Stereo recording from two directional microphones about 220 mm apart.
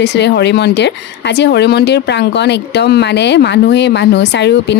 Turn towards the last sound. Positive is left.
turn(degrees=50)  # may be behind; listen again after turning